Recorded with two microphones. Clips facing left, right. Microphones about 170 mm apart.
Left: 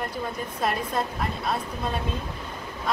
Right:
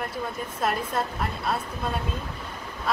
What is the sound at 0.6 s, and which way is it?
A woman's voice, centre (ahead or behind).